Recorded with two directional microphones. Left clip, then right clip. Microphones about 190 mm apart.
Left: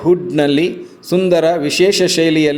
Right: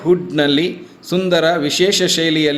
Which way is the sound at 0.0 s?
15° left (ahead or behind).